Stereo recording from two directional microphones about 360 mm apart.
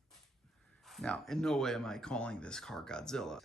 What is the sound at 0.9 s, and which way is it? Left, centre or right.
Speech, centre.